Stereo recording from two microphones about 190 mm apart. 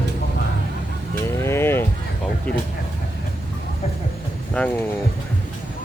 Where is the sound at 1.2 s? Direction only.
15° left (ahead or behind).